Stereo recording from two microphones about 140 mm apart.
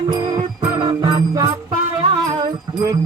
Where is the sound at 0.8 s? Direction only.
30° right (ahead or behind).